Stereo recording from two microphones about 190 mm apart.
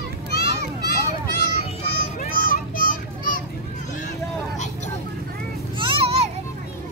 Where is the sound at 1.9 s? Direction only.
45° left (ahead or behind).